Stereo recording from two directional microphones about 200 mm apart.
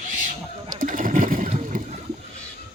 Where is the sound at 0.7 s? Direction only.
40° right (ahead or behind).